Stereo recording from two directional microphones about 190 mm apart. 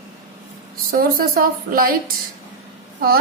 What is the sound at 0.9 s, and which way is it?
A woman's voice, 50° right (ahead or behind).